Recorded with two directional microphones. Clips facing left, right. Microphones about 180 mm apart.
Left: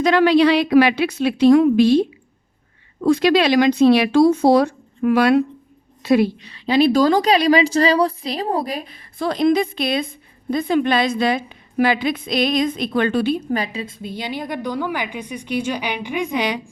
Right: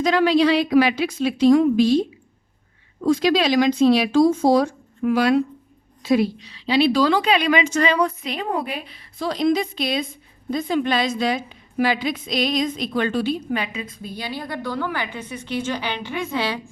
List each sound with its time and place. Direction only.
0.0 s a woman's voice: 65° left (ahead or behind)
13.5 s a woman's voice: 40° left (ahead or behind)
13.8 s a woman's voice: 20° left (ahead or behind)